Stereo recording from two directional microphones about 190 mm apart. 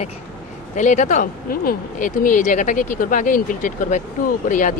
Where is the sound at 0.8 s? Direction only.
40° left (ahead or behind).